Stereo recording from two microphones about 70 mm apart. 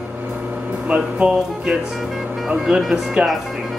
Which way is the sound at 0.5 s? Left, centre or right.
Centre.